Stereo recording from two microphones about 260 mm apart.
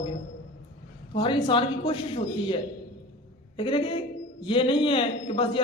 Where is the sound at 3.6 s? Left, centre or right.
Centre.